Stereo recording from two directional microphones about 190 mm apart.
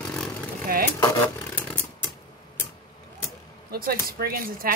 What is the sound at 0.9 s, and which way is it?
Speech, 10° left (ahead or behind).